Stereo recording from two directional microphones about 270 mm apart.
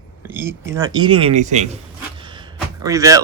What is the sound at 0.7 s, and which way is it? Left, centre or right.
Speech, centre.